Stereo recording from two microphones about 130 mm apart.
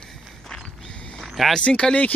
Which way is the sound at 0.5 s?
5° left (ahead or behind).